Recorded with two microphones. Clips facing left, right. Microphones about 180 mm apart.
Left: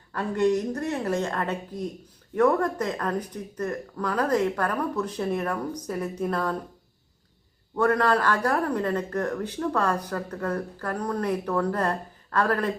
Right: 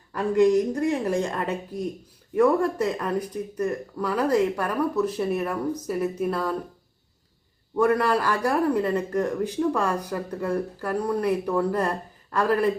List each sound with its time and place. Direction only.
0.1 s a man's voice: 10° right (ahead or behind)
7.8 s a man's voice: 10° right (ahead or behind)